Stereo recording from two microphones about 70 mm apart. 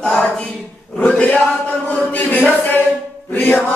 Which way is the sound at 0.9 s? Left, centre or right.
Centre.